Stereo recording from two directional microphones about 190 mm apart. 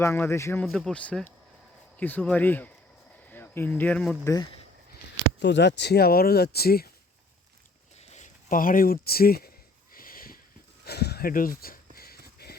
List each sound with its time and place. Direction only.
0.0 s speech: 15° left (ahead or behind)
4.2 s speech: 15° left (ahead or behind)
5.4 s speech: 65° left (ahead or behind)
7.9 s a sound: 40° left (ahead or behind)
9.9 s sniff: 50° left (ahead or behind)
10.8 s a sound: 60° left (ahead or behind)